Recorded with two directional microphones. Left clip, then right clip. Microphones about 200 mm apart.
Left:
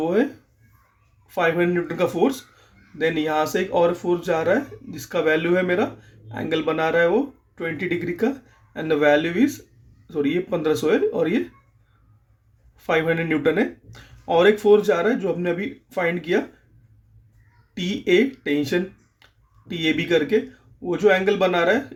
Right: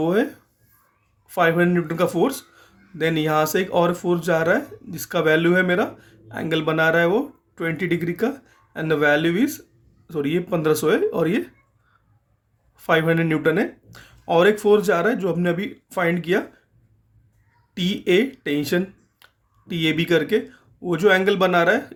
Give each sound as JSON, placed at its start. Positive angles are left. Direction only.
{"t": 0.0, "sound": "speech", "side_deg": -30}
{"t": 1.3, "sound": "speech", "side_deg": -25}
{"t": 12.7, "sound": "speech", "side_deg": -25}
{"t": 17.7, "sound": "speech", "side_deg": -20}